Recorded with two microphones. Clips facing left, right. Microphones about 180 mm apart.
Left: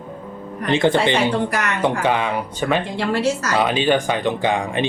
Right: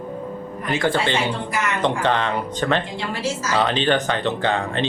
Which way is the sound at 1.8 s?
10° left (ahead or behind).